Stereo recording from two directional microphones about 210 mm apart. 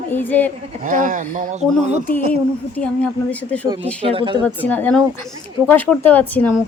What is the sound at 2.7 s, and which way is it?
Speech, 5° left (ahead or behind).